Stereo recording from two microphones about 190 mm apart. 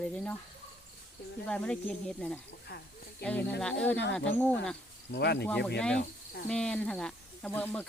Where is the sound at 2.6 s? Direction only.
60° left (ahead or behind).